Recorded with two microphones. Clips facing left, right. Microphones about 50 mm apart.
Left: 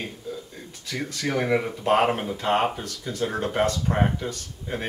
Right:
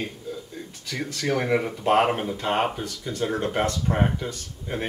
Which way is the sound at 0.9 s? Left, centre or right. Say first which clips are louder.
Right 1 dB; centre.